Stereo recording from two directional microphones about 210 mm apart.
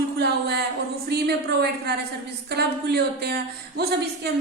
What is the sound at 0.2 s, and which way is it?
A woman's voice, 50° right (ahead or behind).